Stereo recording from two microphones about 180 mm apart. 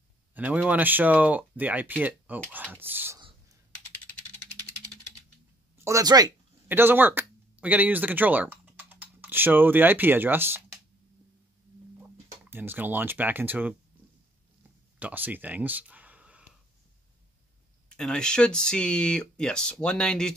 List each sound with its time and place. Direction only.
0.3 s speech: 10° right (ahead or behind)
5.9 s speech: 20° right (ahead or behind)
6.7 s speech: 10° right (ahead or behind)
12.4 s speech: 10° right (ahead or behind)
15.0 s speech: 10° right (ahead or behind)
17.8 s speech: 5° left (ahead or behind)